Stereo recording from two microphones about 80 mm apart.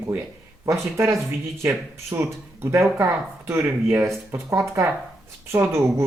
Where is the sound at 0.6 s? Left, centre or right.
Right.